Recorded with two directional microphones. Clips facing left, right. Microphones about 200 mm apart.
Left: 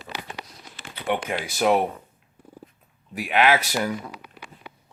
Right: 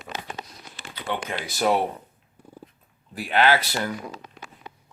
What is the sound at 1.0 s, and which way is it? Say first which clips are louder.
Speech: left 4 dB; 15° left (ahead or behind).